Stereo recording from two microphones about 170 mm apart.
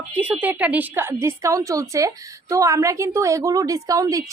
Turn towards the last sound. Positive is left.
turn(degrees=-20)  # may be behind; listen again after turning